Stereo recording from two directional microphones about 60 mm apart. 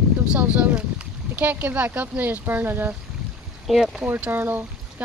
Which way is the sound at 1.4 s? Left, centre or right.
Right.